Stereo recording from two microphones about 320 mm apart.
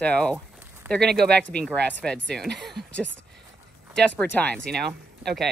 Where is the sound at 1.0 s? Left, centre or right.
Right.